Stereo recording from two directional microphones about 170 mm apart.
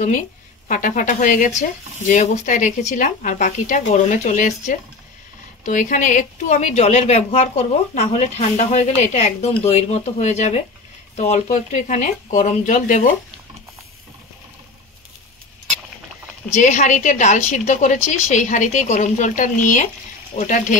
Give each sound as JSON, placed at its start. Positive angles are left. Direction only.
{"t": 0.7, "sound": "a woman's voice", "side_deg": 50}
{"t": 16.5, "sound": "a woman's voice", "side_deg": 45}